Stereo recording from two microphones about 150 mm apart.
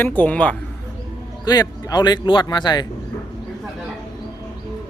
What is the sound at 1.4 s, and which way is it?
A man's voice, 25° left (ahead or behind).